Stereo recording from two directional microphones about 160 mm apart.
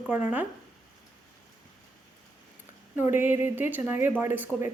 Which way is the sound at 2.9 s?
15° right (ahead or behind).